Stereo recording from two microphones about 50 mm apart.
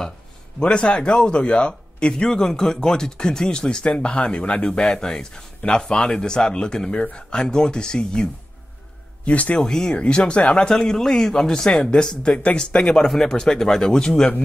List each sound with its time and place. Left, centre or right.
0.6 s speech: centre
9.2 s speech: left
9.6 s speech: centre
10.7 s speech: centre